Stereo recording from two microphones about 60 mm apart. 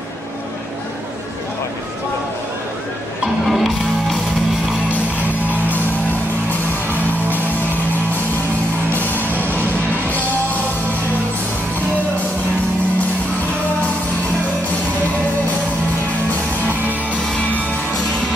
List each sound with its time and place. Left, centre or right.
3.4 s music: centre
8.9 s music: left
9.2 s music: right
10.0 s music: left